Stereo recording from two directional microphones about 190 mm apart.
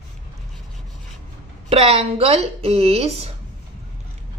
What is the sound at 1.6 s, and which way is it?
A woman's voice, 30° right (ahead or behind).